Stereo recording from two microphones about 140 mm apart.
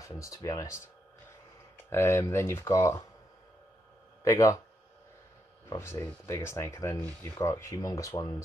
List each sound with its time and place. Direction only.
0.0 s speech: 25° left (ahead or behind)
1.9 s speech: 20° left (ahead or behind)
4.2 s speech: 25° left (ahead or behind)
5.7 s speech: 20° left (ahead or behind)